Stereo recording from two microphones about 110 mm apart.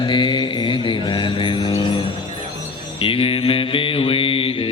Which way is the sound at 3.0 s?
55° left (ahead or behind).